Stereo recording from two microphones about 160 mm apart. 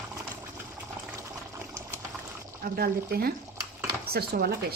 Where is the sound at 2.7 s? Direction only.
70° right (ahead or behind).